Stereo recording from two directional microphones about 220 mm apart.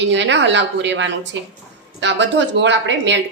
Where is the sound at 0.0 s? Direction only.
55° right (ahead or behind).